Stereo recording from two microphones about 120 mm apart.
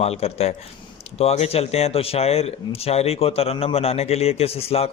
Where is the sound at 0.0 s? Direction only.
60° left (ahead or behind).